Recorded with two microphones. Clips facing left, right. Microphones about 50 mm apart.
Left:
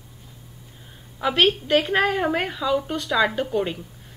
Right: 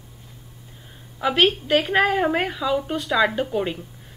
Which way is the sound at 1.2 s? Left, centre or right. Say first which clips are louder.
Right 1 dB; centre.